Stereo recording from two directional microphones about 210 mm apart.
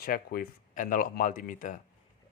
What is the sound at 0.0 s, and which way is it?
Speech, 45° left (ahead or behind).